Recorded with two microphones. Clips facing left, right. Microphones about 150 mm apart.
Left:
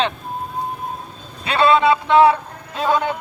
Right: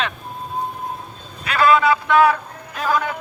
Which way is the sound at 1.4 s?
25° left (ahead or behind).